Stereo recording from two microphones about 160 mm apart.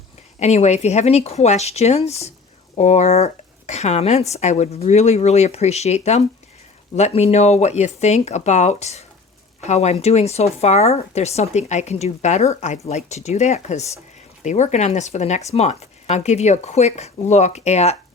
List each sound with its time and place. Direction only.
0.3 s speech: 45° left (ahead or behind)